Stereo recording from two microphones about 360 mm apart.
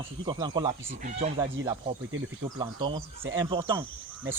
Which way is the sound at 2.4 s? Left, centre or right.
Centre.